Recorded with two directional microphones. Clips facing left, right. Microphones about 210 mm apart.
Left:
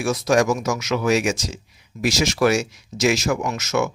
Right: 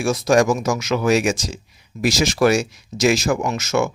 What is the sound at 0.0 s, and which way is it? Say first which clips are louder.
Speech: right 2 dB; 30° right (ahead or behind).